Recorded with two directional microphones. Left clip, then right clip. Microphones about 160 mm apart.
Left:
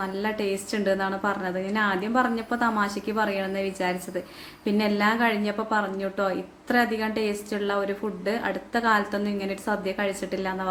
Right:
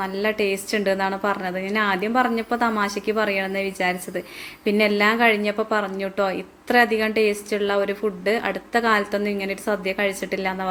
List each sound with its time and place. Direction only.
0.0 s a woman's voice: 20° right (ahead or behind)